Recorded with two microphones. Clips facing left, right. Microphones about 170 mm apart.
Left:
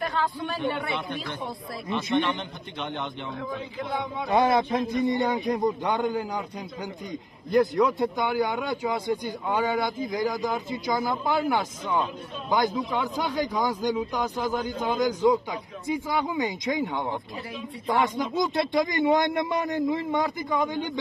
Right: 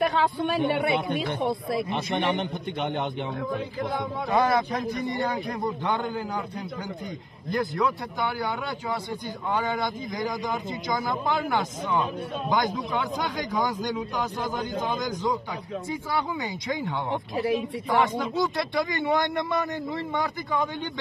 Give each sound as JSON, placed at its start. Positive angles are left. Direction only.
{"t": 0.0, "sound": "speech", "side_deg": -65}
{"t": 2.1, "sound": "speech", "side_deg": -55}
{"t": 4.3, "sound": "a man's voice", "side_deg": 25}
{"t": 7.7, "sound": "a man's voice", "side_deg": 15}
{"t": 18.6, "sound": "a man's voice", "side_deg": 15}